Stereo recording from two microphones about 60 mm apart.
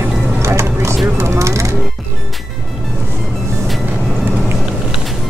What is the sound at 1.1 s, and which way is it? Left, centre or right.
Music, right.